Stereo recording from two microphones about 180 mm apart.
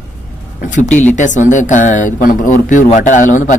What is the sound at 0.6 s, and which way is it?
Speech, 45° left (ahead or behind).